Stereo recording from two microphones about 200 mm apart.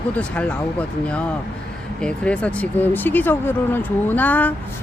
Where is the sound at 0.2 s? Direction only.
5° left (ahead or behind).